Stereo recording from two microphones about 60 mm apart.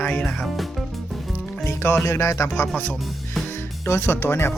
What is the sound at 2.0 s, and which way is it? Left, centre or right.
Speech, left.